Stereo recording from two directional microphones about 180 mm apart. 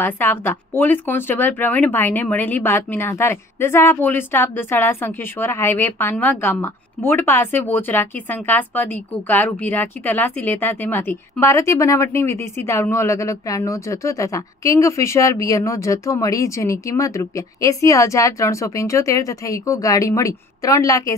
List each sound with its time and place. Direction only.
0.0 s a woman's voice: 10° left (ahead or behind)